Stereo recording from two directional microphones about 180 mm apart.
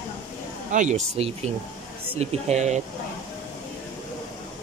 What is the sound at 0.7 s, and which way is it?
Speech, 40° right (ahead or behind).